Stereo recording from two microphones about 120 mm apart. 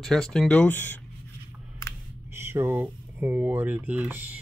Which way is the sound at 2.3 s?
20° right (ahead or behind).